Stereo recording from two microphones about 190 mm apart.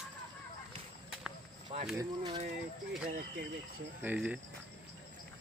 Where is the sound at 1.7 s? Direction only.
40° right (ahead or behind).